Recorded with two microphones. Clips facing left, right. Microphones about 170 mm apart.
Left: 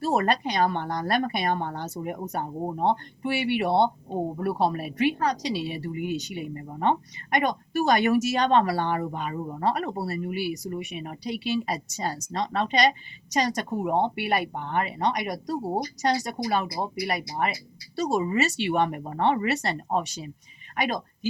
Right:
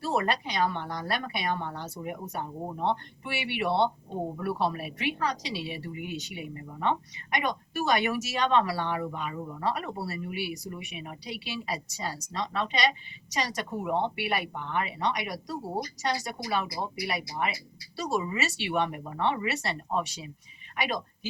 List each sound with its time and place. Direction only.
0.0 s a woman's voice: 45° left (ahead or behind)